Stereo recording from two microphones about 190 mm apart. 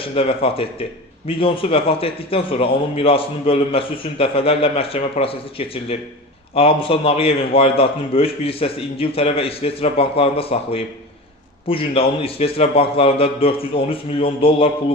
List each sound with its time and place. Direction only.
0.1 s a man's voice: 30° left (ahead or behind)